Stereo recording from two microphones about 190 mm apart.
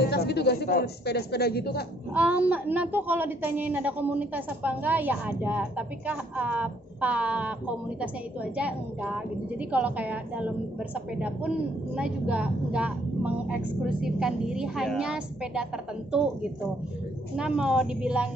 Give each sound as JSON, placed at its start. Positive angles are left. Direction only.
{"t": 0.0, "sound": "speech", "side_deg": 60}
{"t": 2.1, "sound": "a woman's voice", "side_deg": -5}
{"t": 17.4, "sound": "a woman's voice", "side_deg": -5}